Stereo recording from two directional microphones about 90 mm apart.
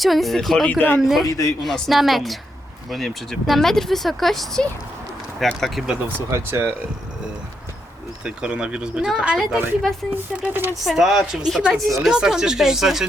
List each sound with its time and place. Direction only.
0.0 s speech: centre (ahead or behind)
0.7 s speech: 20° left (ahead or behind)
1.0 s speech: centre (ahead or behind)
1.3 s speech: 35° left (ahead or behind)
1.6 s speech: centre (ahead or behind)
6.1 s speech: 25° right (ahead or behind)
8.2 s speech: 10° right (ahead or behind)